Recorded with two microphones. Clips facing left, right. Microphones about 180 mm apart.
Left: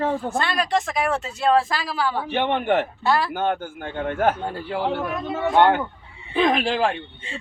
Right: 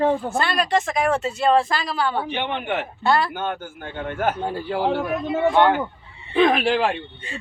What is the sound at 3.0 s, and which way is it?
Speech, centre (ahead or behind).